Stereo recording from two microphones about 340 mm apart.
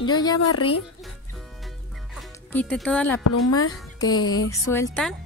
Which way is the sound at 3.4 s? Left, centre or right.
Left.